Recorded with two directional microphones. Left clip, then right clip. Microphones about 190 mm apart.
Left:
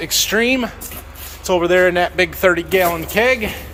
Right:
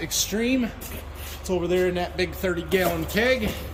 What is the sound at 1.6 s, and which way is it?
Speech, 15° left (ahead or behind).